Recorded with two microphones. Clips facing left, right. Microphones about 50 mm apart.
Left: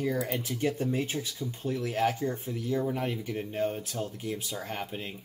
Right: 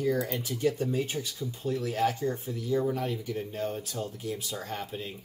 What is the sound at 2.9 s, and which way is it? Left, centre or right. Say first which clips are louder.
Speech: even; left.